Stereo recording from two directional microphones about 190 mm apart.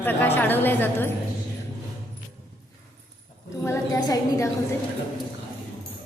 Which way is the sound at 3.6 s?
15° left (ahead or behind).